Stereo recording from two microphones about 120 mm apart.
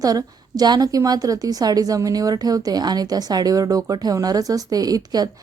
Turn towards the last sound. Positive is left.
turn(degrees=-30)  # may be behind; listen again after turning